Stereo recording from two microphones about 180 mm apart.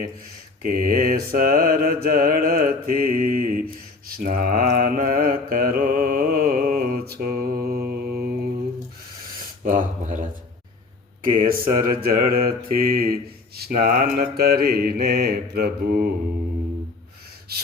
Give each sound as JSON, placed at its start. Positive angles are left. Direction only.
{"t": 0.6, "sound": "mantra", "side_deg": -50}
{"t": 9.6, "sound": "speech", "side_deg": -45}
{"t": 11.2, "sound": "mantra", "side_deg": -50}
{"t": 12.0, "sound": "speech", "side_deg": -55}
{"t": 17.5, "sound": "gasp", "side_deg": -60}